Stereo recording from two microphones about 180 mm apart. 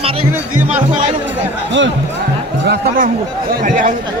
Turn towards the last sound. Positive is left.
turn(degrees=-50)  # may be behind; listen again after turning